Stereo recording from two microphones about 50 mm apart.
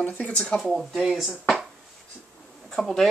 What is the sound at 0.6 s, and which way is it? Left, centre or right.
Speech, centre.